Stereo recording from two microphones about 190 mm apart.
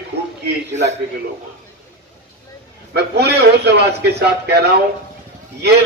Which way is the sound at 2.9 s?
60° right (ahead or behind).